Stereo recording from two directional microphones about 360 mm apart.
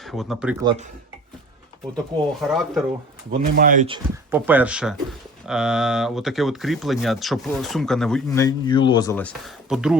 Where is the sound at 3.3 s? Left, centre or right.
Right.